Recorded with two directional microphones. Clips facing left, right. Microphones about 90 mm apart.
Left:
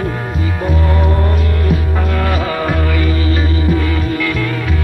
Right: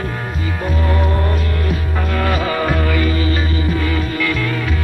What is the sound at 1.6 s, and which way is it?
Music, 15° left (ahead or behind).